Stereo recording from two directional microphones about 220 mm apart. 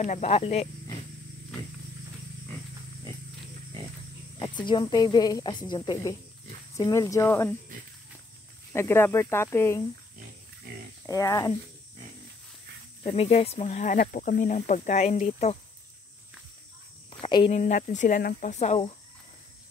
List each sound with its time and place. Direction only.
0.0 s a woman's voice: 30° left (ahead or behind)
4.6 s a woman's voice: 20° left (ahead or behind)
8.7 s speech: 10° left (ahead or behind)
11.1 s speech: 15° left (ahead or behind)
13.0 s speech: 25° left (ahead or behind)
17.2 s speech: 25° left (ahead or behind)